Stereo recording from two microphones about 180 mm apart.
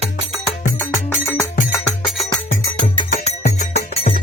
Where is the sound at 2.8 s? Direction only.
40° left (ahead or behind).